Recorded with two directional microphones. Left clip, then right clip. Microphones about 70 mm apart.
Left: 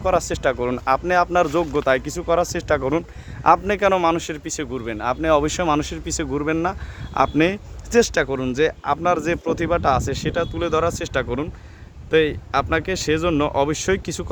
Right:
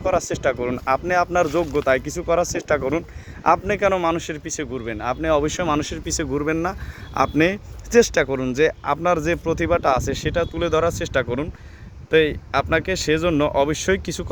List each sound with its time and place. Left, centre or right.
0.0 s speech: left
4.8 s speech: centre
5.8 s speech: centre
6.7 s speech: centre